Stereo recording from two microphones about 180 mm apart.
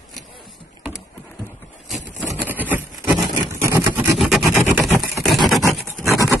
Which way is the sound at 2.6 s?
10° right (ahead or behind).